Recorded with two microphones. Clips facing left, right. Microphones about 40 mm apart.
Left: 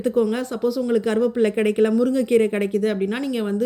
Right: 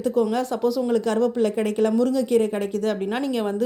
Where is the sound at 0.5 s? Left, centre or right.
Centre.